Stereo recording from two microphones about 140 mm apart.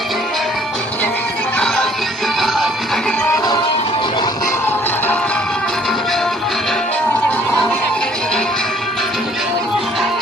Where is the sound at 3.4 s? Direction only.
25° left (ahead or behind).